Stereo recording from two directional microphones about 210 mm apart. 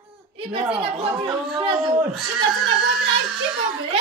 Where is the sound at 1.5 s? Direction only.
25° right (ahead or behind).